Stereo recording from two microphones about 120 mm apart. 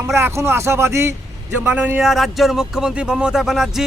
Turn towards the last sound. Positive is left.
turn(degrees=-5)  # may be behind; listen again after turning